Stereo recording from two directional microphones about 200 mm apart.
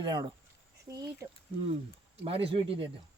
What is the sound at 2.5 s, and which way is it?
Speech, 25° right (ahead or behind).